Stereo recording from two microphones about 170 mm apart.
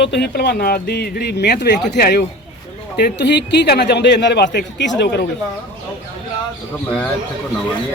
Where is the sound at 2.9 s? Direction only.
80° left.